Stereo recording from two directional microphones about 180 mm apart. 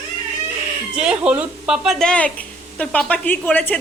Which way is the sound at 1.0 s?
5° right (ahead or behind).